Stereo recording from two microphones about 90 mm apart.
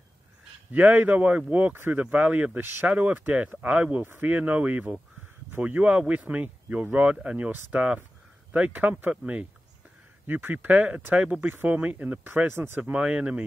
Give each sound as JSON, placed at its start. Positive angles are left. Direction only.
{"t": 0.7, "sound": "speech", "side_deg": -20}
{"t": 12.9, "sound": "speech", "side_deg": -15}